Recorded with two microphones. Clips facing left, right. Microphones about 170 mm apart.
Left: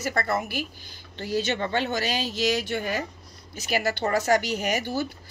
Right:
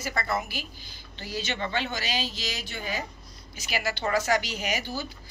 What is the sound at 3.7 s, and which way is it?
Speech, 40° left (ahead or behind).